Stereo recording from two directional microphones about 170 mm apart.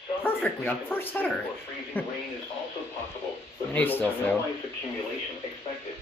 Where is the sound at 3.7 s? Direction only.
10° left (ahead or behind).